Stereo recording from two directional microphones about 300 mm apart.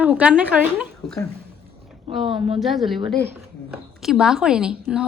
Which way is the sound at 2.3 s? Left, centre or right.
Centre.